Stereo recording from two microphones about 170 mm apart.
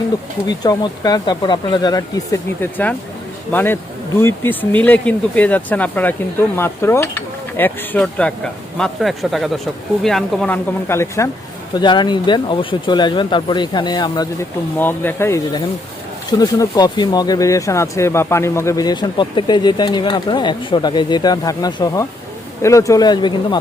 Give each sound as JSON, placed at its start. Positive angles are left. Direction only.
{"t": 0.4, "sound": "speech", "side_deg": 25}
{"t": 14.8, "sound": "speech", "side_deg": 10}